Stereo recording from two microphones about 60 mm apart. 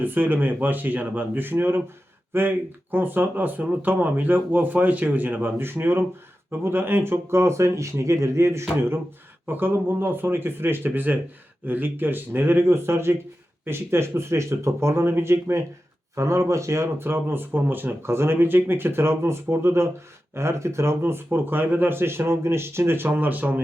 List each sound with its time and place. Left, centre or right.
0.0 s speech: right
9.5 s speech: right